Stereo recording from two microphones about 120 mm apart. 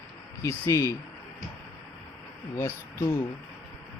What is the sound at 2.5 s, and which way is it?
Speech, 25° left (ahead or behind).